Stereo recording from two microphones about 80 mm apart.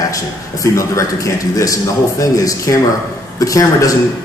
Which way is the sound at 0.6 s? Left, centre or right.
Left.